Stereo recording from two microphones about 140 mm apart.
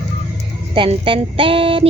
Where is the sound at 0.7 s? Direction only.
35° right (ahead or behind).